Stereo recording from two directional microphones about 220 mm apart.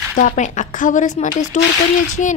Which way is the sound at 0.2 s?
35° left (ahead or behind).